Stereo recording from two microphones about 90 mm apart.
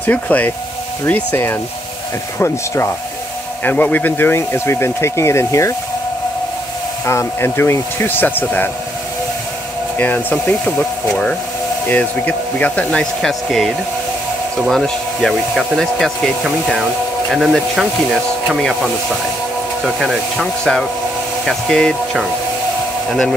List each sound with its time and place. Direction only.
0.0 s speech: 15° left (ahead or behind)
3.6 s speech: 20° left (ahead or behind); by 5.8 s 35° left (ahead or behind)
7.1 s speech: 30° left (ahead or behind)
9.9 s speech: 20° left (ahead or behind)
23.0 s speech: 5° left (ahead or behind)